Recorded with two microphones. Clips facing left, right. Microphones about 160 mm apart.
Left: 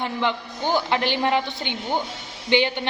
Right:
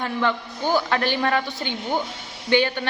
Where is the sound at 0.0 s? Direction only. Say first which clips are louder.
Right 1 dB; 20° left (ahead or behind).